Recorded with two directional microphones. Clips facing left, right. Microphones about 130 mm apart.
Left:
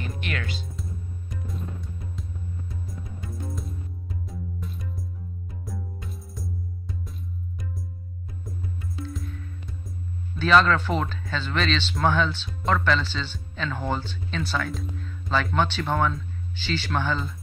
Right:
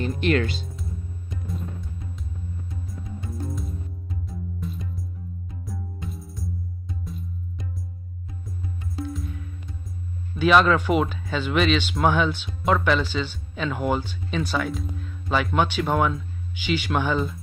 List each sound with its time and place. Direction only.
0.0 s speech: 30° right (ahead or behind)
3.4 s music: centre (ahead or behind)
6.0 s music: centre (ahead or behind)
9.0 s music: 35° right (ahead or behind)
10.4 s speech: 10° right (ahead or behind)